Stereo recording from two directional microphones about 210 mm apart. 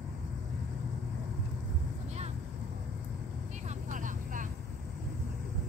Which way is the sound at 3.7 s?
35° right (ahead or behind).